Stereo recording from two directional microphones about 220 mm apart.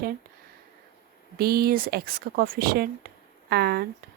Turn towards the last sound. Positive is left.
turn(degrees=-45)  # may be behind; listen again after turning